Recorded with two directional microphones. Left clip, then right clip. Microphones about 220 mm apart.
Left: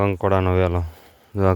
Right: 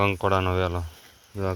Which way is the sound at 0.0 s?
35° left (ahead or behind).